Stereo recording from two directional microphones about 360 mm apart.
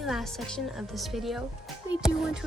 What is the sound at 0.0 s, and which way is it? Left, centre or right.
Speech, centre.